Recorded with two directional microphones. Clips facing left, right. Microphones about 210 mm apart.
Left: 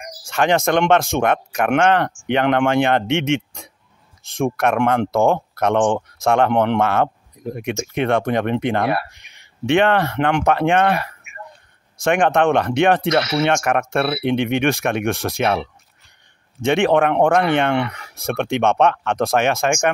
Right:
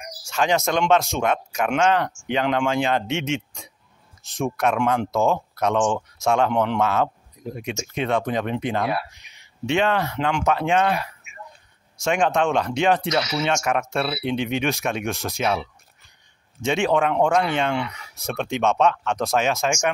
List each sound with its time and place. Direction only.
0.0 s speech: 55° left (ahead or behind)